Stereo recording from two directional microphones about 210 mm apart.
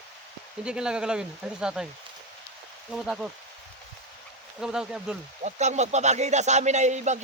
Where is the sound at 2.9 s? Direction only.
Centre (ahead or behind).